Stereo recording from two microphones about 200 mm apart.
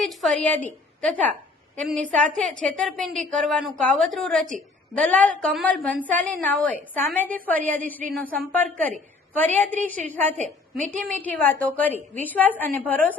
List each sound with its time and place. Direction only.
0.0 s a woman's voice: centre (ahead or behind)
10.3 s a woman's voice: 35° right (ahead or behind)
11.1 s a woman's voice: 10° left (ahead or behind)